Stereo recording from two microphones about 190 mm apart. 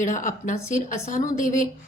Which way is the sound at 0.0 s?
40° left (ahead or behind).